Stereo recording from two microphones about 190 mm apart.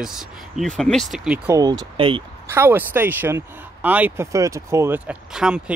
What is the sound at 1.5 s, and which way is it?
Speech, 20° right (ahead or behind).